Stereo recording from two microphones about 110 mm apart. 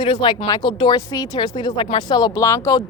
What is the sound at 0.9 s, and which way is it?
Speech, 30° left (ahead or behind).